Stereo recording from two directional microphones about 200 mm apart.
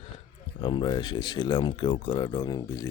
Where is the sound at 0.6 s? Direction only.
25° left (ahead or behind).